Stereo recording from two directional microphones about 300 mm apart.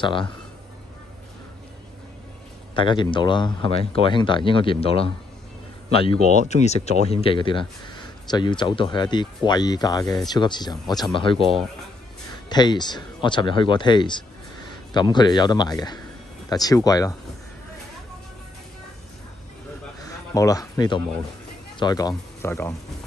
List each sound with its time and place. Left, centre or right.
0.0 s speech: centre
2.7 s a man's voice: centre
20.3 s speech: centre